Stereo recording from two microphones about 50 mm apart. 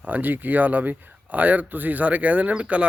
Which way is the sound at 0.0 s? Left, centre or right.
Right.